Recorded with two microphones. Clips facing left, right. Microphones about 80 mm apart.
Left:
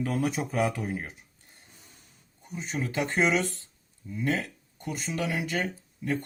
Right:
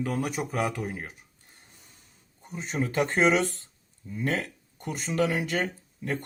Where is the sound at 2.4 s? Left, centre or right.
Right.